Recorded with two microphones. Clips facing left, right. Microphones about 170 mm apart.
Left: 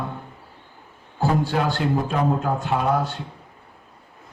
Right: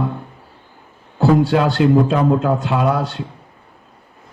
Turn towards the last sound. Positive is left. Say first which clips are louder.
# right 4 dB
turn(degrees=-75)  # may be behind; listen again after turning